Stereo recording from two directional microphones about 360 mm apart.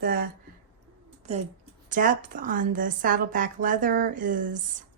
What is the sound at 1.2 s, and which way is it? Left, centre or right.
A woman's voice, centre.